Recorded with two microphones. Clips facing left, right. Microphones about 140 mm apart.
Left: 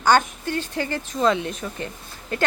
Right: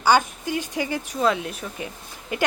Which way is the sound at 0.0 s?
10° right (ahead or behind).